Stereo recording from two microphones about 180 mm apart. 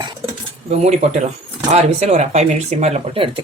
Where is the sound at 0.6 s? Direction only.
35° right (ahead or behind).